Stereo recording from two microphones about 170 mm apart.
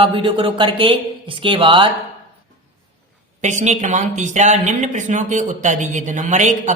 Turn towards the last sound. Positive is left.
turn(degrees=-45)  # may be behind; listen again after turning